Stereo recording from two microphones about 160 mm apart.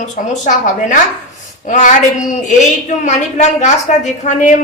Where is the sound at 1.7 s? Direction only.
50° left (ahead or behind).